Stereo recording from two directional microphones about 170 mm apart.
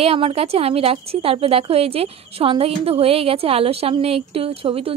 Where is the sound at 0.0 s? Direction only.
35° right (ahead or behind).